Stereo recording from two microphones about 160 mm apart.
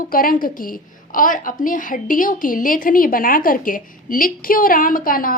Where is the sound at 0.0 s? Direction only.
60° left (ahead or behind).